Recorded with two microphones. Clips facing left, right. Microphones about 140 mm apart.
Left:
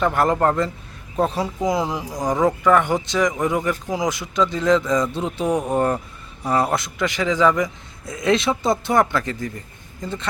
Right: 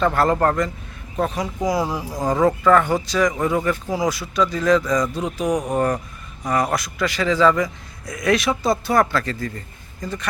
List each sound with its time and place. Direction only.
0.0 s a man's voice: 15° left (ahead or behind)